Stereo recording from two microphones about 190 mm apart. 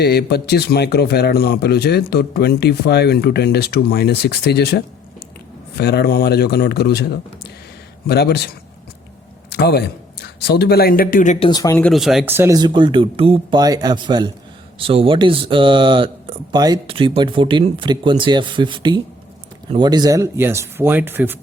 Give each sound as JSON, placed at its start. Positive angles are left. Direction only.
{"t": 0.0, "sound": "a man's voice", "side_deg": 55}
{"t": 9.5, "sound": "a man's voice", "side_deg": 60}
{"t": 11.4, "sound": "speech", "side_deg": 20}
{"t": 11.8, "sound": "speech", "side_deg": 0}